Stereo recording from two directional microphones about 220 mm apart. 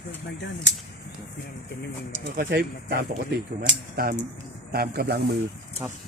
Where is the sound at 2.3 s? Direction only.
45° right (ahead or behind).